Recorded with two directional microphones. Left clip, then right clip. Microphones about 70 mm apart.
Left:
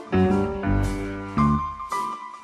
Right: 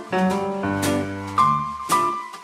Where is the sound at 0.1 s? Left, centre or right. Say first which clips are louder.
Right 1 dB; left.